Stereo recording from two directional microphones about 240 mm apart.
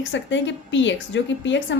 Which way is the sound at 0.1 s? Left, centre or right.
Left.